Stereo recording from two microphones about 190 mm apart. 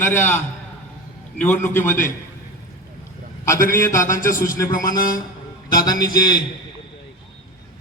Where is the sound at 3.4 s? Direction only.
15° left (ahead or behind).